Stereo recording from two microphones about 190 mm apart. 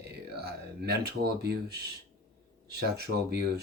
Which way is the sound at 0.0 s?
60° right (ahead or behind).